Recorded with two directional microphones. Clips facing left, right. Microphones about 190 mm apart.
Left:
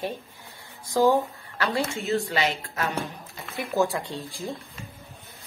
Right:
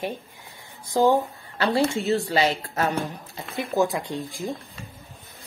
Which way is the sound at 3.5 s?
20° right (ahead or behind).